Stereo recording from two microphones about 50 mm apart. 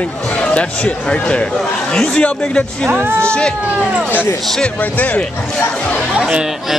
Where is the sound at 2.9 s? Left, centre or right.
Right.